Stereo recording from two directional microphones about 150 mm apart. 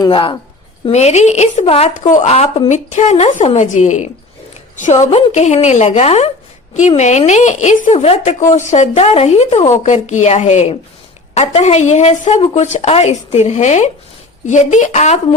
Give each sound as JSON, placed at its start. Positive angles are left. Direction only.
{"t": 0.0, "sound": "a woman's voice", "side_deg": 35}
{"t": 0.9, "sound": "speech", "side_deg": 45}
{"t": 1.9, "sound": "a woman's voice", "side_deg": 55}